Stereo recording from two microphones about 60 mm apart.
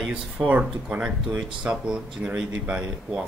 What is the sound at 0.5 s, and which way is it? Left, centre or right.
Speech, right.